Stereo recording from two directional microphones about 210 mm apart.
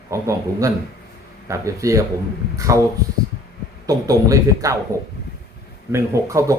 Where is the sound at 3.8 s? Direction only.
15° right (ahead or behind).